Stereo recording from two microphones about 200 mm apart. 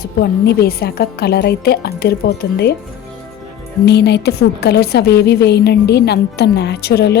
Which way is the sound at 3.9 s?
55° left (ahead or behind).